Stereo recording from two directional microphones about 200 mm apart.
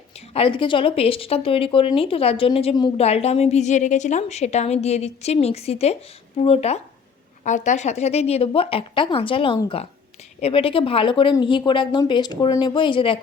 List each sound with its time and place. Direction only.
0.1 s speech: 30° left (ahead or behind)